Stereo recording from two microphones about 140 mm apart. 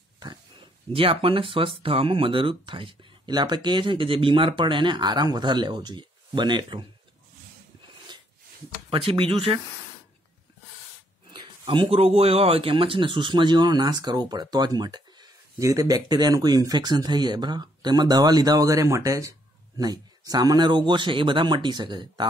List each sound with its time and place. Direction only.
0.9 s speech: 40° right (ahead or behind)
8.9 s speech: 40° right (ahead or behind)
11.2 s speech: 35° right (ahead or behind)